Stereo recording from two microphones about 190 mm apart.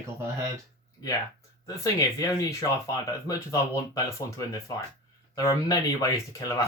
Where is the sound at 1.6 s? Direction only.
20° left (ahead or behind).